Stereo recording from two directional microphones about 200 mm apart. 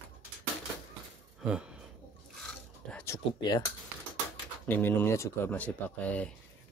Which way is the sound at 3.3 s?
20° left (ahead or behind).